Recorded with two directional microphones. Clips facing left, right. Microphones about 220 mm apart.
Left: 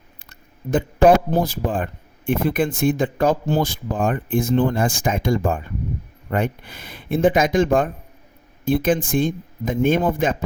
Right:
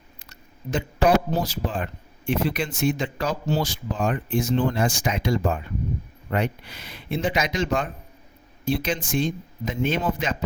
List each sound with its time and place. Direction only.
0.3 s speech: 50° left (ahead or behind)